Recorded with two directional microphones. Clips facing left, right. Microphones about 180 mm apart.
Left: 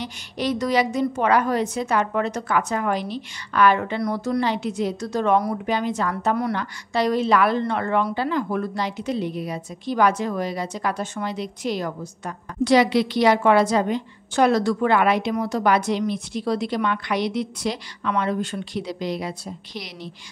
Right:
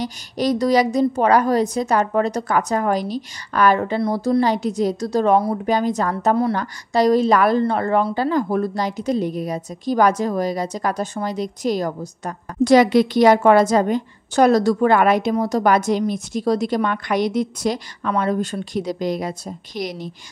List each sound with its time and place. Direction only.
0.0 s a woman's voice: 40° right (ahead or behind)